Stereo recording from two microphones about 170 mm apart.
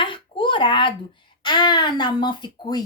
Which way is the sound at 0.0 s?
30° left (ahead or behind).